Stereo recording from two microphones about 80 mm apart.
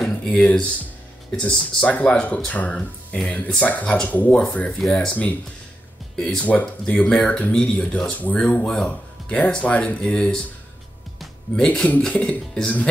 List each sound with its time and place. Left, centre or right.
0.0 s speech: centre
6.4 s speech: left
11.5 s speech: centre